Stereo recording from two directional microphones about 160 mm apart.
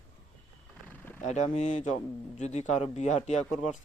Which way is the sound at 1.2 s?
50° left (ahead or behind).